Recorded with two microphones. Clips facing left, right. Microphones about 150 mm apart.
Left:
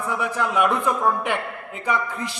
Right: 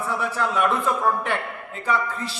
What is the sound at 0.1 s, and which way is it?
A man's voice, 15° left (ahead or behind).